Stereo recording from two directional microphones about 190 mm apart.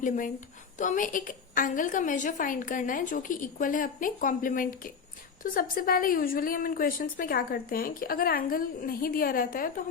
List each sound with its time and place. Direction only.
0.8 s a woman's voice: 45° left (ahead or behind)